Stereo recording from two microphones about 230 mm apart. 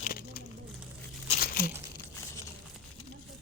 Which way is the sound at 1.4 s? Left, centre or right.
Left.